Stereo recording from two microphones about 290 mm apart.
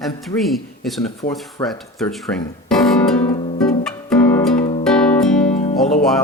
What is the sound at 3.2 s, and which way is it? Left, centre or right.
Music, left.